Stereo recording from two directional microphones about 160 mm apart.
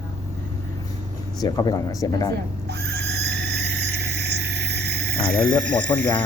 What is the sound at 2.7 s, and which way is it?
Squeal, 90° right.